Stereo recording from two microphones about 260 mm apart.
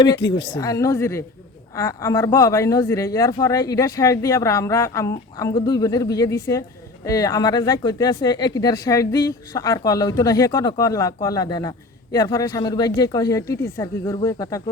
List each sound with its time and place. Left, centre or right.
0.2 s a woman's voice: left
0.4 s speech: centre